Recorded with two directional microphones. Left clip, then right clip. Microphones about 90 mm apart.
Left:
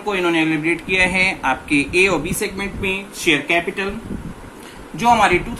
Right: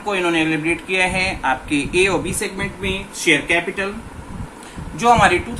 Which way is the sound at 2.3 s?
25° left (ahead or behind).